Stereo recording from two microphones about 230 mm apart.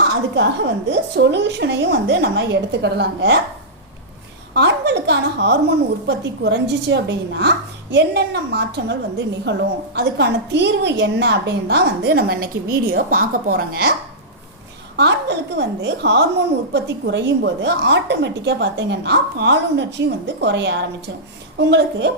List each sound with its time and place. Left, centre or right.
0.3 s a woman's voice: right
4.5 s a woman's voice: right
14.9 s a woman's voice: right